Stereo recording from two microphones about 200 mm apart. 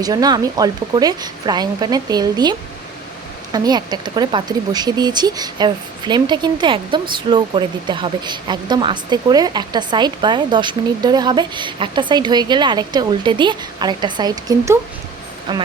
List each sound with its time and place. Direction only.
0.0 s speech: 20° right (ahead or behind)